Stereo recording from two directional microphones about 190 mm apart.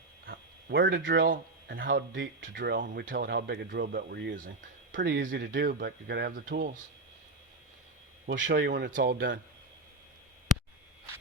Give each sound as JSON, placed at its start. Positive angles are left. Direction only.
{"t": 0.3, "sound": "a sound", "side_deg": -55}
{"t": 1.2, "sound": "speech", "side_deg": -50}
{"t": 4.4, "sound": "speech", "side_deg": -45}
{"t": 8.4, "sound": "speech", "side_deg": -50}